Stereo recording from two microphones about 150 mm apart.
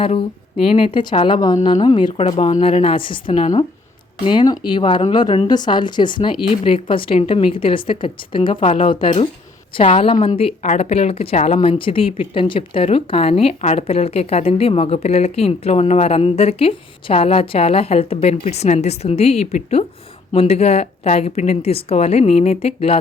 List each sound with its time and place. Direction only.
0.0 s a woman's voice: 40° left (ahead or behind)
2.4 s a woman's voice: 40° left (ahead or behind)